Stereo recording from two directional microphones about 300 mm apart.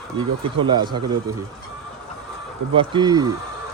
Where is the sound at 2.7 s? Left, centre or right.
Centre.